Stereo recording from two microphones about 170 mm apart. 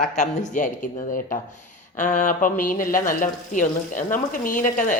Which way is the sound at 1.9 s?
50° left (ahead or behind).